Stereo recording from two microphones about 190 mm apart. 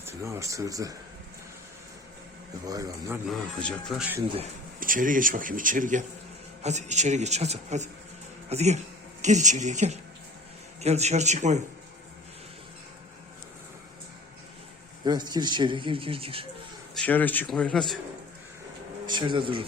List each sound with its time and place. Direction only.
0.0 s speech: 15° right (ahead or behind)
2.6 s speech: 20° right (ahead or behind)
3.2 s a man's voice: 5° left (ahead or behind)
4.8 s a man's voice: 45° right (ahead or behind)
15.0 s speech: 20° right (ahead or behind)
16.9 s a man's voice: 5° left (ahead or behind)
19.0 s speech: 25° right (ahead or behind)